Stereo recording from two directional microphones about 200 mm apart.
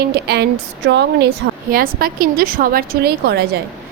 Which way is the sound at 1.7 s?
45° right (ahead or behind).